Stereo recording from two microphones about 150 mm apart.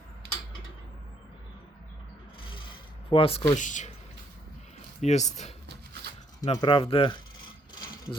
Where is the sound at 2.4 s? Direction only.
35° left (ahead or behind).